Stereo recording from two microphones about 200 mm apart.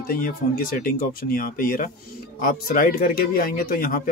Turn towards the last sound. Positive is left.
turn(degrees=45)  # may be behind; listen again after turning